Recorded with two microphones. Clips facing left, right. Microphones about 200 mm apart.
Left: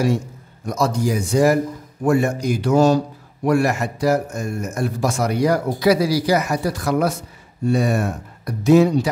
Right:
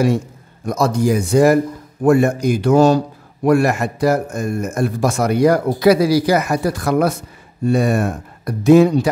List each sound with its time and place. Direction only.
0.7 s a man's voice: 55° right (ahead or behind)